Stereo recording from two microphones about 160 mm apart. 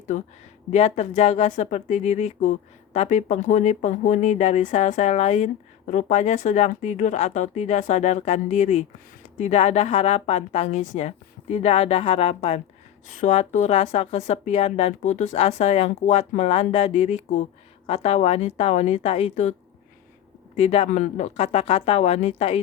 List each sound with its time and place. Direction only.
0.1 s a woman's voice: 45° left (ahead or behind)
13.1 s a woman's voice: 50° left (ahead or behind)
20.6 s a woman's voice: 40° left (ahead or behind)